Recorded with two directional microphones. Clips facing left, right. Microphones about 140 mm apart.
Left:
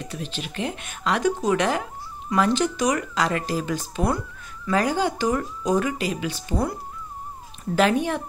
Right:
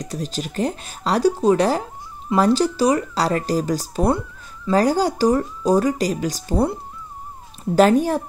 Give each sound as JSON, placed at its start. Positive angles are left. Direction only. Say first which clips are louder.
{"t": 0.0, "sound": "speech", "louder": "right 5 dB", "side_deg": -40}